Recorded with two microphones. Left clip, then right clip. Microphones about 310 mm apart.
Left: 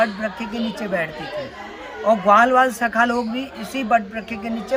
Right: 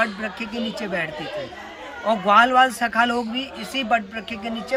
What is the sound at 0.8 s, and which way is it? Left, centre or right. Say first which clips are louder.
Speech: left 3 dB; centre.